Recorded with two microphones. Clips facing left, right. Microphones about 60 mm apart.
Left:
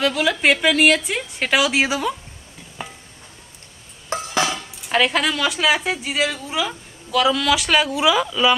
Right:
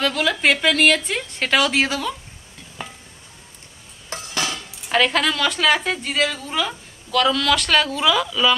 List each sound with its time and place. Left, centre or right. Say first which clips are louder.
0.0 s a woman's voice: left 1 dB; centre
2.8 s stir: left 1 dB; centre
4.1 s a sound: left 5 dB; left
4.8 s a woman's voice: even; centre